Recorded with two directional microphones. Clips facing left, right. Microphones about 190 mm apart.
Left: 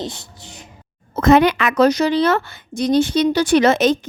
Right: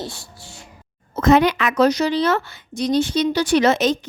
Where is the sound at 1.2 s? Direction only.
60° left (ahead or behind).